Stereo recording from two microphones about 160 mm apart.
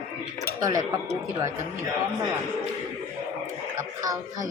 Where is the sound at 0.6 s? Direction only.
20° right (ahead or behind).